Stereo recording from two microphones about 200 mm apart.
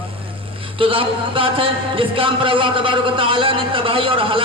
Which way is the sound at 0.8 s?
25° right (ahead or behind).